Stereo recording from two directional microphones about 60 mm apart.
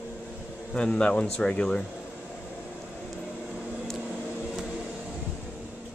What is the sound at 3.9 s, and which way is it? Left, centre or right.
Microwave oven, centre.